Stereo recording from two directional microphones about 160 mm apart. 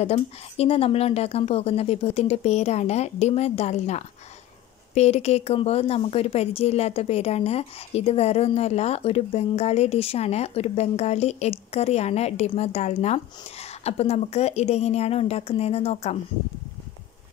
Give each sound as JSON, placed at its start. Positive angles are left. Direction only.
{"t": 0.0, "sound": "a woman's voice", "side_deg": 40}